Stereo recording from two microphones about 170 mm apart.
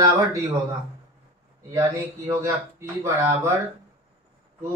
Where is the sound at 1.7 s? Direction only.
20° right (ahead or behind).